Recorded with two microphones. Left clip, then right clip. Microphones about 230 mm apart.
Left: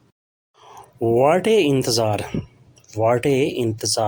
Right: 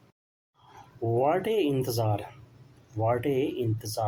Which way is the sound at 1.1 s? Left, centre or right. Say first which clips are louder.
Left 10 dB; left.